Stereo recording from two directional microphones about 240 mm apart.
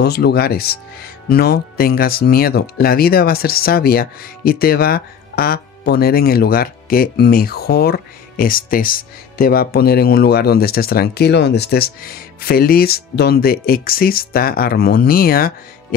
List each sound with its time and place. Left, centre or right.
0.0 s speech: left